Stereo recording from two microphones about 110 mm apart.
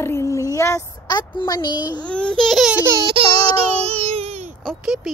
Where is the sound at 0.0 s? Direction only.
25° left (ahead or behind).